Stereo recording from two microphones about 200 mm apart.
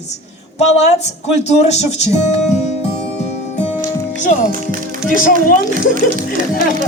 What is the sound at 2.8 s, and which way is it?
Music, 35° left (ahead or behind).